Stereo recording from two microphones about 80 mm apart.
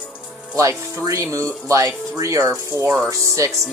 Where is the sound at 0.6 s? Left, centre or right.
Right.